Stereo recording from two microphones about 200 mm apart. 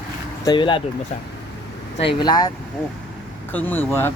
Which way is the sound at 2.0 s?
25° left (ahead or behind).